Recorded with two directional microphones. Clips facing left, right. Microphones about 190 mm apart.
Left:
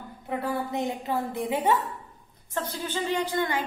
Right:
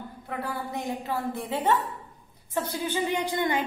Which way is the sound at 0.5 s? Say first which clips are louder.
Left 4 dB; 25° left (ahead or behind).